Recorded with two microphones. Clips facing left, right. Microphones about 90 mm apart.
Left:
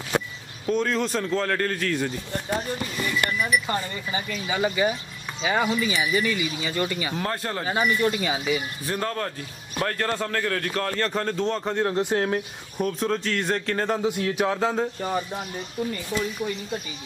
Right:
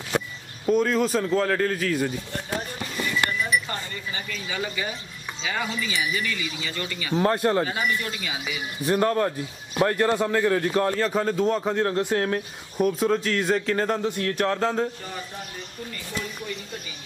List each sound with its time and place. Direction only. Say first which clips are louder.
0.7 s speech: right 3 dB; 5° right (ahead or behind)
3.6 s speech: left 4 dB; 15° left (ahead or behind)
7.2 s speech: right 12 dB; 20° right (ahead or behind)
7.6 s speech: left 4 dB; 25° left (ahead or behind)
8.9 s a man's voice: right 7 dB; 20° right (ahead or behind)
11.0 s speech: right 2 dB; 5° right (ahead or behind)